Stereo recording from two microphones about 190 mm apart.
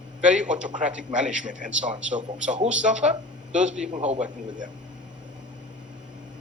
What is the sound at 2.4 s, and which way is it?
Speech, 40° right (ahead or behind).